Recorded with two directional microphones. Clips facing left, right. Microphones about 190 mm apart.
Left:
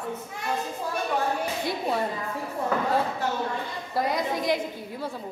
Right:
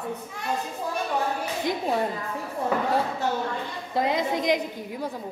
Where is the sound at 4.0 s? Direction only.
20° right (ahead or behind).